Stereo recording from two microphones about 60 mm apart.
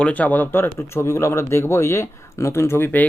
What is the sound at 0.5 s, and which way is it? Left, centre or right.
Speech, left.